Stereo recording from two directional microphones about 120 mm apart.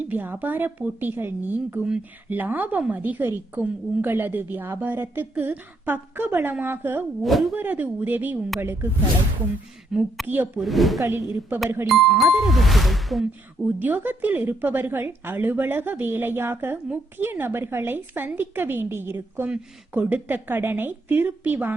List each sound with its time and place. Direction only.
0.1 s a woman's voice: 15° right (ahead or behind)
7.3 s speech: centre (ahead or behind)
7.5 s a woman's voice: 15° right (ahead or behind)
9.9 s speech: 5° right (ahead or behind)
10.2 s a woman's voice: 15° right (ahead or behind)
10.6 s speech: centre (ahead or behind)
11.0 s a woman's voice: 20° right (ahead or behind)
11.9 s speech: centre (ahead or behind)
13.7 s a woman's voice: 15° right (ahead or behind)